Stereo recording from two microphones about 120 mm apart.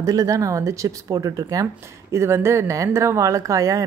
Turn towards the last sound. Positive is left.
turn(degrees=-30)  # may be behind; listen again after turning